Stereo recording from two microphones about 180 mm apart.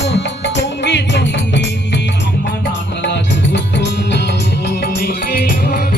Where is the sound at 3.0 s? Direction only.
75° left (ahead or behind).